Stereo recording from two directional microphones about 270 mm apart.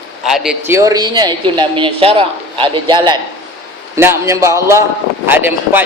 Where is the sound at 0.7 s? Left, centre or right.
Centre.